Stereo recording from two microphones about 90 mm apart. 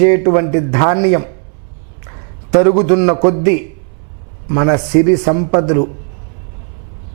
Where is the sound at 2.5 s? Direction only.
15° right (ahead or behind).